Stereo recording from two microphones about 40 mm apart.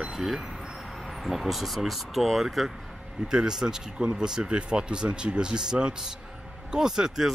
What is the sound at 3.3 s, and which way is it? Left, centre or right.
Speech, centre.